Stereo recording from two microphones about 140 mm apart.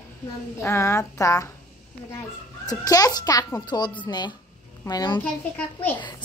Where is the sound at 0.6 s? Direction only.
20° left (ahead or behind).